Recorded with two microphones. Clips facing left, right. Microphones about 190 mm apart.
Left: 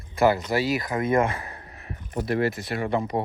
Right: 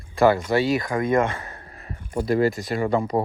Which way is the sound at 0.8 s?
25° left (ahead or behind).